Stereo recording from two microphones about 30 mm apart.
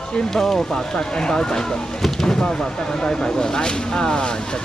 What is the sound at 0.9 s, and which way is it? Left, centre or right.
Speech, left.